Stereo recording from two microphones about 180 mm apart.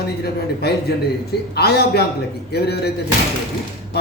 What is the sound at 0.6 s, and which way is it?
A man's voice, 65° left (ahead or behind).